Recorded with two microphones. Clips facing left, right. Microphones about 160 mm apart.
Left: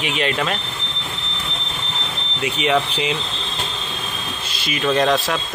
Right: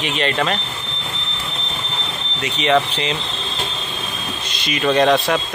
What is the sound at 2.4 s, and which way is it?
Speech, 5° left (ahead or behind).